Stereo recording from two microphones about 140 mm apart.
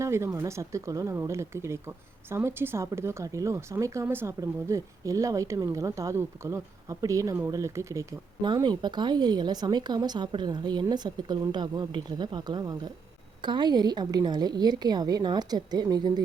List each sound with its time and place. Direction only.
0.0 s speech: 20° right (ahead or behind)
8.6 s speech: 30° right (ahead or behind)